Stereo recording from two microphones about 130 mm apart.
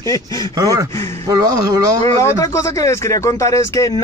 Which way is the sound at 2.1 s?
25° left (ahead or behind).